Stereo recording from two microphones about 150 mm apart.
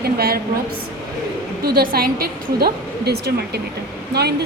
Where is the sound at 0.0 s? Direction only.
90° right.